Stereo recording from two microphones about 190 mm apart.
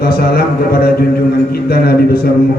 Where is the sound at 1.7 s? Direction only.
55° left (ahead or behind).